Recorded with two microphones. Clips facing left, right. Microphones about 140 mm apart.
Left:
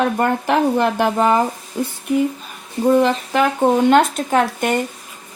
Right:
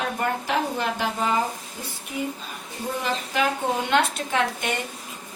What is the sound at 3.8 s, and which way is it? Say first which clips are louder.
Speech: left 9 dB; 45° left (ahead or behind).